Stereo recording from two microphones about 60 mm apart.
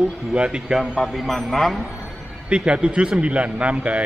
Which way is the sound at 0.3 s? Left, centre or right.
Centre.